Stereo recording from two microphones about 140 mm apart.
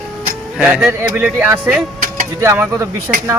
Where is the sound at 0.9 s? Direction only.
20° right (ahead or behind).